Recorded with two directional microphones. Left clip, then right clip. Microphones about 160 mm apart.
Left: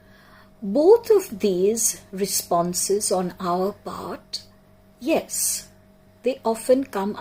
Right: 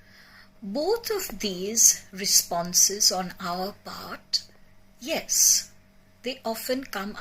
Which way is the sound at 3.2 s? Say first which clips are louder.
Left 7 dB; 15° left (ahead or behind).